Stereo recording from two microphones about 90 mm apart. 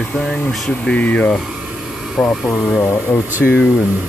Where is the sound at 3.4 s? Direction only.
10° left (ahead or behind).